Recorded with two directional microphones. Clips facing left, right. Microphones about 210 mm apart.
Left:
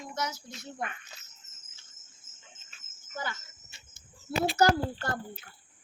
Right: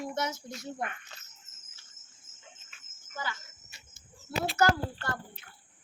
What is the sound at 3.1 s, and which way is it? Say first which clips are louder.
Speech: left 1 dB; 45° left (ahead or behind).